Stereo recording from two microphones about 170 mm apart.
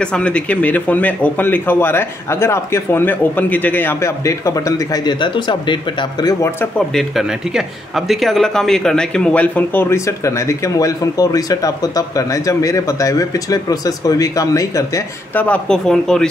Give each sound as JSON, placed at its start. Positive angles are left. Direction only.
{"t": 0.0, "sound": "speech", "side_deg": 5}
{"t": 6.6, "sound": "speech", "side_deg": 0}